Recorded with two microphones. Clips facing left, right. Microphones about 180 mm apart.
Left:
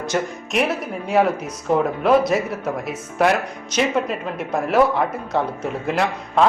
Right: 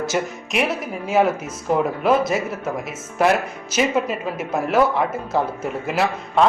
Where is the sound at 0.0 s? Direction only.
5° right (ahead or behind).